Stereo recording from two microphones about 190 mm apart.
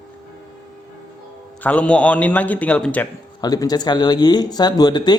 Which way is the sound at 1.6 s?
5° left (ahead or behind).